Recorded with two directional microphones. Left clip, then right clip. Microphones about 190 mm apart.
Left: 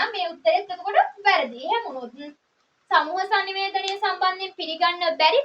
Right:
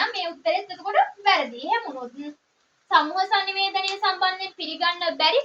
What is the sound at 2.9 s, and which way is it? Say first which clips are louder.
A woman's voice: right 1 dB; 40° left (ahead or behind).